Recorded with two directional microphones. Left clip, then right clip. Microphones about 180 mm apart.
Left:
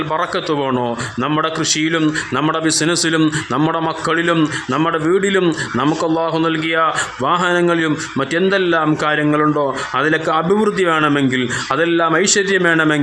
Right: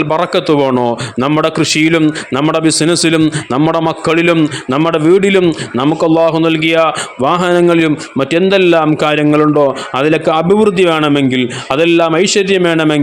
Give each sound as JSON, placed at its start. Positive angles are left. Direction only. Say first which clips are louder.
{"t": 0.1, "sound": "a man's voice", "louder": "right 6 dB", "side_deg": -40}
{"t": 2.0, "sound": "speech", "louder": "right 4 dB", "side_deg": -25}
{"t": 2.5, "sound": "a man's voice", "louder": "right 7 dB", "side_deg": -35}